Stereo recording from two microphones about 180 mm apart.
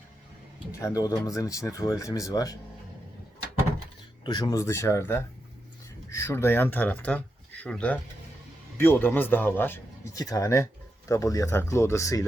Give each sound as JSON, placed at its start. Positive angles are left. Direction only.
{"t": 0.7, "sound": "speech", "side_deg": 15}
{"t": 4.2, "sound": "a man's voice", "side_deg": 25}